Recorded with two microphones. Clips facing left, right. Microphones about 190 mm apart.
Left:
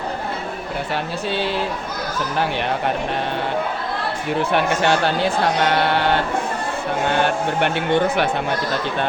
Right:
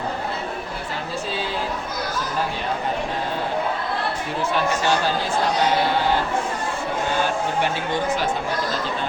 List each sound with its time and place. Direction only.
0.9 s speech: 70° left (ahead or behind)
4.5 s speech: 65° left (ahead or behind)